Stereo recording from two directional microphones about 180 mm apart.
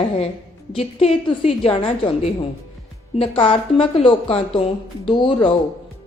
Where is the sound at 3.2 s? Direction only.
30° left (ahead or behind).